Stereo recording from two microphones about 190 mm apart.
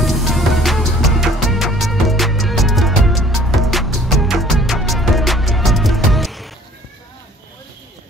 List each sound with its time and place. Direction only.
0.0 s music: centre (ahead or behind)